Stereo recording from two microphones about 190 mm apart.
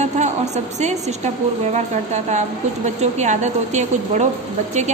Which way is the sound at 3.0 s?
35° right (ahead or behind).